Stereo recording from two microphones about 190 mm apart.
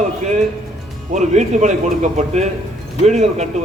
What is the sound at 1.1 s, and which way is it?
A man's voice, 40° right (ahead or behind).